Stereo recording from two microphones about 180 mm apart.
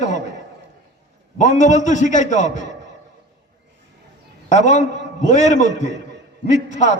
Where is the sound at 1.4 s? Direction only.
40° left (ahead or behind).